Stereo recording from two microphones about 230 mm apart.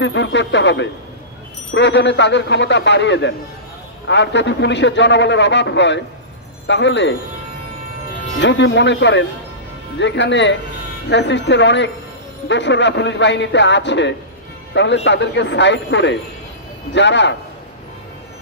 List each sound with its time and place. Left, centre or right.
0.0 s a man's voice: left
8.4 s a man's voice: left